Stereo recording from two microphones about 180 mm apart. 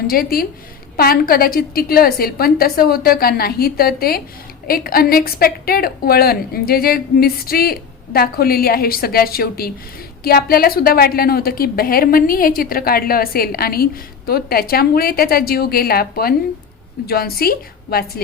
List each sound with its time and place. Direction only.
0.1 s a woman's voice: 55° left (ahead or behind)